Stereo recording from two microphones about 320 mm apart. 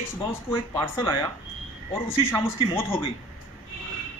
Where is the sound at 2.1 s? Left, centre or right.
Centre.